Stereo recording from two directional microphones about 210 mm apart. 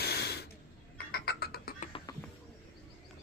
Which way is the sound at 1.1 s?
50° left (ahead or behind).